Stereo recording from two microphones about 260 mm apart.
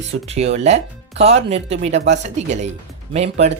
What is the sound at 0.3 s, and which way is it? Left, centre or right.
Speech, right.